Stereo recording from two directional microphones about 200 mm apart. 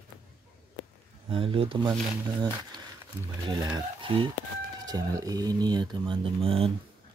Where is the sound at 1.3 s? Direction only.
25° right (ahead or behind).